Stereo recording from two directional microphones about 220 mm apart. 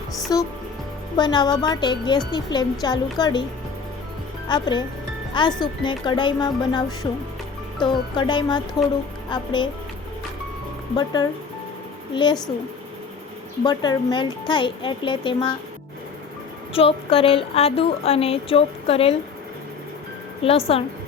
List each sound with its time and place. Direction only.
0.3 s speech: 15° left (ahead or behind)
4.4 s speech: 20° left (ahead or behind)
10.9 s speech: 20° left (ahead or behind)
13.7 s speech: 20° left (ahead or behind)
16.7 s speech: 25° left (ahead or behind)
20.4 s speech: 25° left (ahead or behind)